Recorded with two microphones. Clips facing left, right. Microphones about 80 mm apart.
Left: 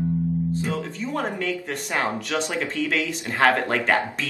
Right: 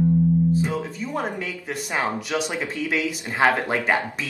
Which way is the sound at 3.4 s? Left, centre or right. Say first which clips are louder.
Even; centre.